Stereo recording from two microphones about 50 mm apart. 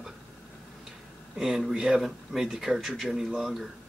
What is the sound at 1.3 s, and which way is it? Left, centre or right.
A man's voice, centre.